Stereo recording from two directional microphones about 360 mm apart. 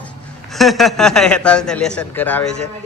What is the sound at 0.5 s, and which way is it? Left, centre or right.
A man's voice, centre.